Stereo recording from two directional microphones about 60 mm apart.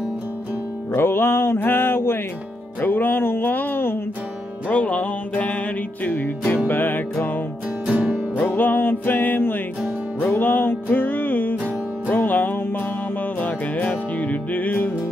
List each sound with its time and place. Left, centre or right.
0.9 s mantra: left
2.8 s music: left
4.6 s music: left